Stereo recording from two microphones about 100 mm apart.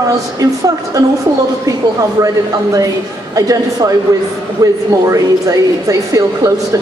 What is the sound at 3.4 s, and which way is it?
Speech, 35° right (ahead or behind).